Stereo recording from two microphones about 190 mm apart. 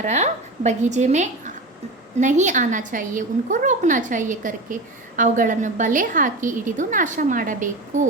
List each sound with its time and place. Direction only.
0.0 s a woman's voice: 35° right (ahead or behind)